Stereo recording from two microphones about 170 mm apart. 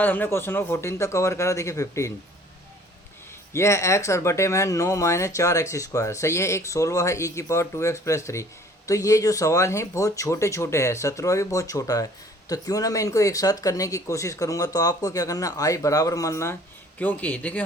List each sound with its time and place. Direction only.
0.0 s speech: 10° left (ahead or behind)
3.5 s speech: 15° left (ahead or behind)